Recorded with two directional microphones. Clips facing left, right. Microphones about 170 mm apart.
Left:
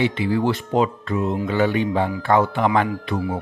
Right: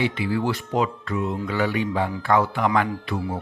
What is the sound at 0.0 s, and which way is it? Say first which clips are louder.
Speech: left 3 dB; 25° left (ahead or behind).